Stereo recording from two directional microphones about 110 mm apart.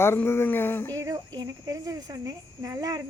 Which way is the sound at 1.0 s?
35° right (ahead or behind).